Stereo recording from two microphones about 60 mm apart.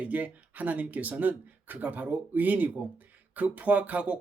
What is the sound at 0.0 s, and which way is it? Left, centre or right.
Speech, right.